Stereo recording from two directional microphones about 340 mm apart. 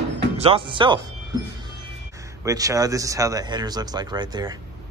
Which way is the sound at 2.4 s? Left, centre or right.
Centre.